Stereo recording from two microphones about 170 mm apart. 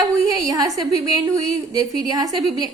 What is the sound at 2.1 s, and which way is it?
Speech, 20° right (ahead or behind).